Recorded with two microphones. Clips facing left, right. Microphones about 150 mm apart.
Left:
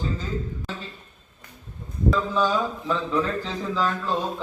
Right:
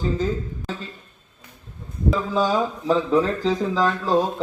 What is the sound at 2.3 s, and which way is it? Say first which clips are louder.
A man's voice: right 2 dB; 40° right (ahead or behind).